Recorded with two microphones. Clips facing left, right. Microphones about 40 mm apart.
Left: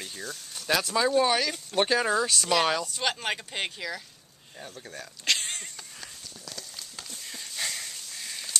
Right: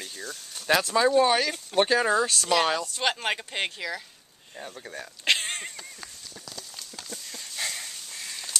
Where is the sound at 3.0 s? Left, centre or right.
Centre.